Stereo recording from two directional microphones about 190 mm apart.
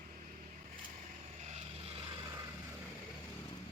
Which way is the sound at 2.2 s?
20° right (ahead or behind).